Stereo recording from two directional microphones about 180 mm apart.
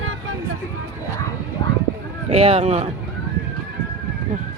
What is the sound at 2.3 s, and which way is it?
Speech, 30° right (ahead or behind).